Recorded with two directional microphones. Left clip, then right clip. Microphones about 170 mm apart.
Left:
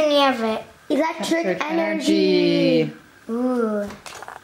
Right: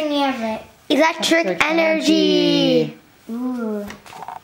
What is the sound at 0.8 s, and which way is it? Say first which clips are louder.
A woman's voice: right 6 dB; 25° right (ahead or behind).